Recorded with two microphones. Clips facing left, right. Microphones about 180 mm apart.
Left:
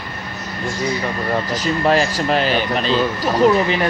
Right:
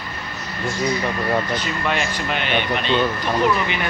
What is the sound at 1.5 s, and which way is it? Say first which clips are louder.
Speech: left 7 dB; 40° left (ahead or behind).